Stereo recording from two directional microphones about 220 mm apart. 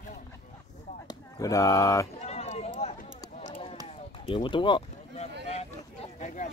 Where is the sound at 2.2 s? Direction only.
30° left (ahead or behind).